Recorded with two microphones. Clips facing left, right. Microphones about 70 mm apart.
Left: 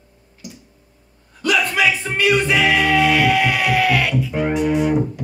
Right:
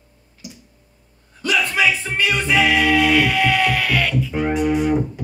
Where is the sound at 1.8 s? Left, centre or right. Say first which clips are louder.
Left 1 dB; centre.